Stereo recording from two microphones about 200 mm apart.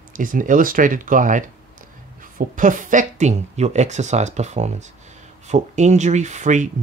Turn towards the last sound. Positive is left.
turn(degrees=-40)  # may be behind; listen again after turning